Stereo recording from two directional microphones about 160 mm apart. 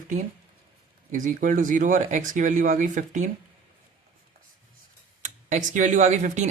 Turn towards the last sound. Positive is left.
turn(degrees=-45)  # may be behind; listen again after turning